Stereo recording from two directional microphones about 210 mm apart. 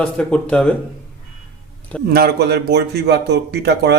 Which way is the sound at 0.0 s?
5° left (ahead or behind).